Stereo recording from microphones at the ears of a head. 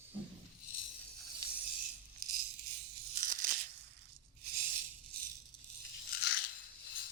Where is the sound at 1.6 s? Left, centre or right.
Right.